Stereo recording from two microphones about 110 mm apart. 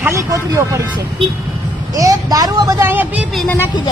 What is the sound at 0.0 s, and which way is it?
Speech, 25° right (ahead or behind).